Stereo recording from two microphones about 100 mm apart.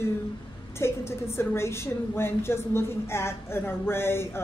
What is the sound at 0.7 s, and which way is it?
A woman's voice, 25° left (ahead or behind).